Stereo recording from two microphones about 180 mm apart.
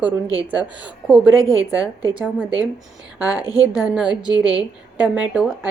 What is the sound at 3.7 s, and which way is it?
Speech, 20° left (ahead or behind).